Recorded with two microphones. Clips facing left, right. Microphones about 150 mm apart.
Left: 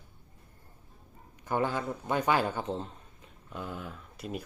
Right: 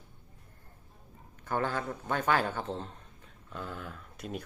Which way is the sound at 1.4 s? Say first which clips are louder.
Left 2 dB; 15° left (ahead or behind).